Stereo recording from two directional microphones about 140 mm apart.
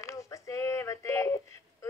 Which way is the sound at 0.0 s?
20° left (ahead or behind).